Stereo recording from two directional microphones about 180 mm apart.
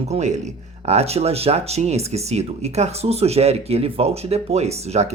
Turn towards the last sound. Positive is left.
turn(degrees=-35)  # may be behind; listen again after turning